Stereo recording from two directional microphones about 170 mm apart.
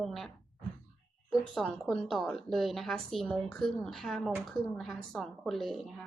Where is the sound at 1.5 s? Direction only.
Centre (ahead or behind).